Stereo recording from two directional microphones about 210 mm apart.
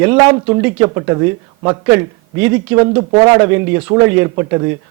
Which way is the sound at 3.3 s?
15° right (ahead or behind).